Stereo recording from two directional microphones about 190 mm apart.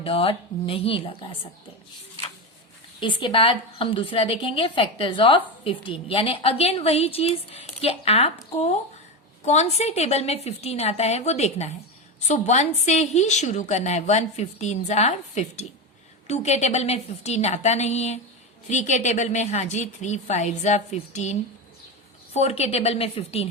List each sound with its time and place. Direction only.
0.0 s a woman's voice: 30° left (ahead or behind)
3.0 s a woman's voice: 25° left (ahead or behind)